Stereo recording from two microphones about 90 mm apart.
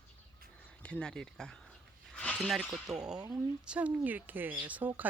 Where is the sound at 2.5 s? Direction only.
10° right (ahead or behind).